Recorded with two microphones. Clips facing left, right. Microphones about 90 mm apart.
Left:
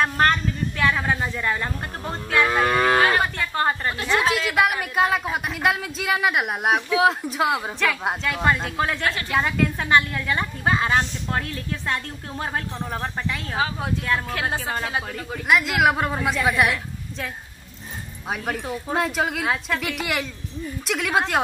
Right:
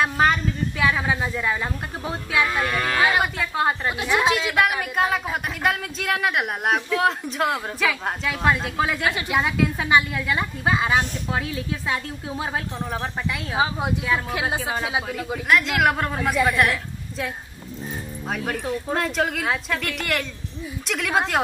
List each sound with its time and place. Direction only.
0.0 s a woman's voice: 5° right (ahead or behind)
2.6 s cattle: 40° left (ahead or behind)
3.0 s a woman's voice: 10° right (ahead or behind)
13.6 s a woman's voice: 15° right (ahead or behind); by 17.3 s centre (ahead or behind)
18.3 s a woman's voice: 5° left (ahead or behind)